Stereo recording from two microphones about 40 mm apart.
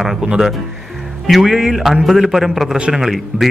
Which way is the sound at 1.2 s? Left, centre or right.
Centre.